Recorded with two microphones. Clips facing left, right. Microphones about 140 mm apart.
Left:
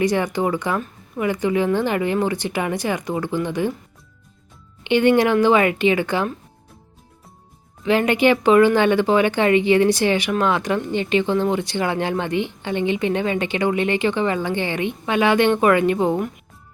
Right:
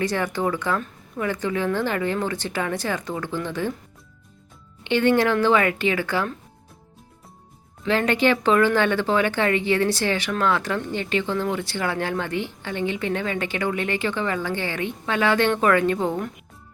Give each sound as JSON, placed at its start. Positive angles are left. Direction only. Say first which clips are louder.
{"t": 0.0, "sound": "speech", "louder": "left 4 dB", "side_deg": 15}
{"t": 4.8, "sound": "speech", "louder": "left 3 dB", "side_deg": 15}
{"t": 7.9, "sound": "speech", "louder": "left 4 dB", "side_deg": 15}